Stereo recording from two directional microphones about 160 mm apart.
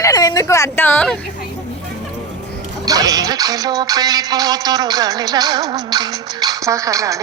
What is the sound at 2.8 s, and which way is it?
Music, 25° right (ahead or behind).